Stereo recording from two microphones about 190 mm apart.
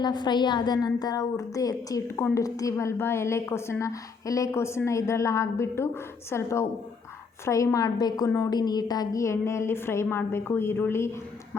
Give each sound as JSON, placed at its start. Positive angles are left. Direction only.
{"t": 0.0, "sound": "a woman's voice", "side_deg": 25}